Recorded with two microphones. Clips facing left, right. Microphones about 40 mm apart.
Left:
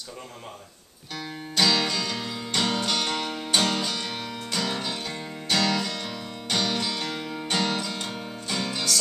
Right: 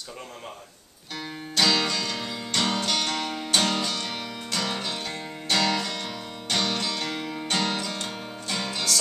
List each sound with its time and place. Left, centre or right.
1.1 s music: centre